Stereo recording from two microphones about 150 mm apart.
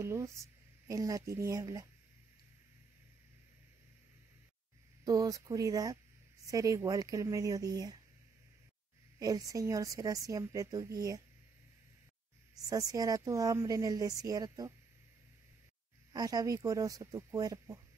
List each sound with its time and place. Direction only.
0.0 s speech: 20° right (ahead or behind)
5.0 s a woman's voice: 20° right (ahead or behind)
9.2 s a woman's voice: 25° right (ahead or behind)
12.6 s a woman's voice: 25° right (ahead or behind)
16.1 s a woman's voice: 25° right (ahead or behind)